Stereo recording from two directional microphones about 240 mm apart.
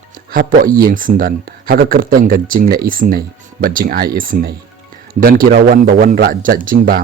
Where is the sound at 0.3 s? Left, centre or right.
Right.